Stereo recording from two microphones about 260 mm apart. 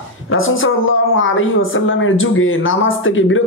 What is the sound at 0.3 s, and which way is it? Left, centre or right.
A woman's voice, left.